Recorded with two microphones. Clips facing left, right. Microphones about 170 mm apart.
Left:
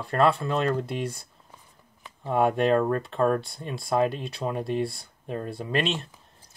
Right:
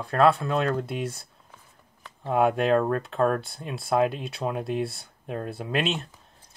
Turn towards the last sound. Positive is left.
turn(degrees=0)  # may be behind; listen again after turning